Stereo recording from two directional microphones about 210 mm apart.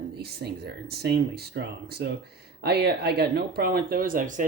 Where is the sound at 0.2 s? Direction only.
50° right (ahead or behind).